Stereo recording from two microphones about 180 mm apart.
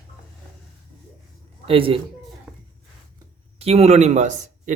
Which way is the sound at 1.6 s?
30° right (ahead or behind).